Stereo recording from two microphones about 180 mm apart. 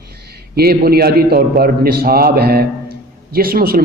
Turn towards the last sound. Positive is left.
turn(degrees=-55)  # may be behind; listen again after turning